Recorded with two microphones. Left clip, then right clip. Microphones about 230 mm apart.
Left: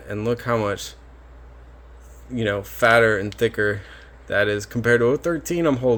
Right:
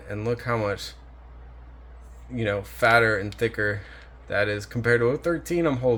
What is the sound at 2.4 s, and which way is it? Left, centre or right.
Speech, left.